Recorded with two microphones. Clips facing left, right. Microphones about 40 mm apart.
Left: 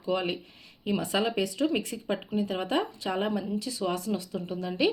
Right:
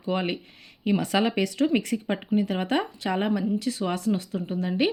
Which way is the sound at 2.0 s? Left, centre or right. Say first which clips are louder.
Right 4 dB; right.